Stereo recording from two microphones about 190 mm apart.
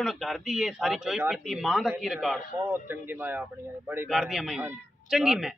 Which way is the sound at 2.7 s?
10° right (ahead or behind).